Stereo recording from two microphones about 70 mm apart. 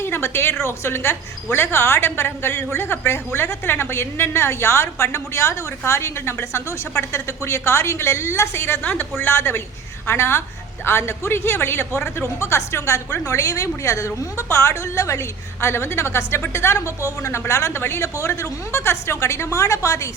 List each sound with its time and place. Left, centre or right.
0.0 s a woman's voice: left
13.2 s a woman's voice: left
15.6 s a woman's voice: left